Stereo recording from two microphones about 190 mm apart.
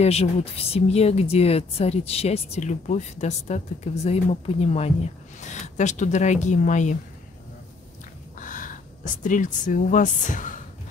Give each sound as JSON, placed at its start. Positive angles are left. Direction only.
{"t": 0.0, "sound": "speech", "side_deg": 35}
{"t": 8.4, "sound": "speech", "side_deg": 45}